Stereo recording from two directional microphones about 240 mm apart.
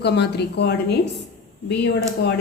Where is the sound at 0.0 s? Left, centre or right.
Left.